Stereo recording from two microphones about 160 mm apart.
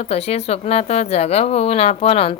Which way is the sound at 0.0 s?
40° left (ahead or behind).